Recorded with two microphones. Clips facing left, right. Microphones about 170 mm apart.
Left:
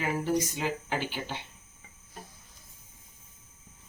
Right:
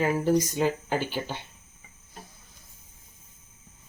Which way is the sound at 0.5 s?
40° right (ahead or behind).